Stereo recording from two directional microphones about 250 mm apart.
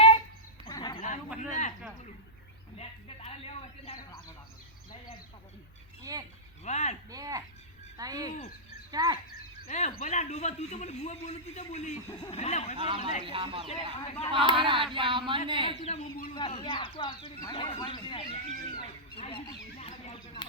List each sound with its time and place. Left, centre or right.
0.6 s a sound: centre
1.4 s a sound: left
2.7 s speech: left
6.0 s speech: centre
6.7 s speech: left
7.1 s speech: centre
9.6 s speech: left
12.7 s a sound: right
13.7 s speech: left
14.5 s a sound: centre
15.8 s speech: left
16.3 s speech: left
18.8 s honk: left